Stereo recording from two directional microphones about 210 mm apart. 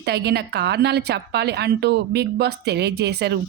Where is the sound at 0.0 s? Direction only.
50° right (ahead or behind).